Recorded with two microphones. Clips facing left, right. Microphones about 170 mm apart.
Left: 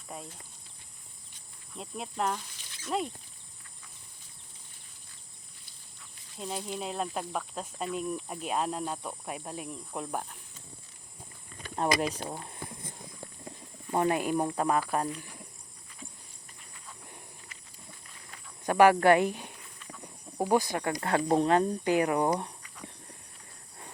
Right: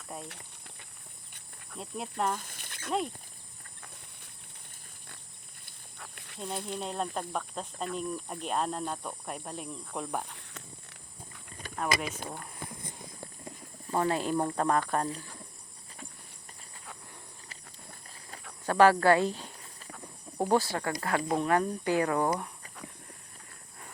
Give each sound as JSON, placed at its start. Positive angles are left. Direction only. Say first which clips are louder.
{"t": 1.8, "sound": "speech", "louder": "even", "side_deg": 0}
{"t": 2.4, "sound": "a sound", "louder": "right 3 dB", "side_deg": -55}
{"t": 5.6, "sound": "a sound", "louder": "right 10 dB", "side_deg": -65}
{"t": 6.4, "sound": "speech", "louder": "even", "side_deg": 5}
{"t": 11.8, "sound": "speech", "louder": "left 3 dB", "side_deg": 30}
{"t": 13.9, "sound": "speech", "louder": "left 1 dB", "side_deg": 20}
{"t": 18.6, "sound": "speech", "louder": "left 1 dB", "side_deg": 15}
{"t": 21.5, "sound": "speech", "louder": "left 2 dB", "side_deg": 20}